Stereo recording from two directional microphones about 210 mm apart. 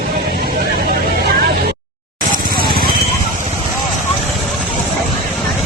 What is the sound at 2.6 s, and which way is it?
Vehicle, 45° right (ahead or behind).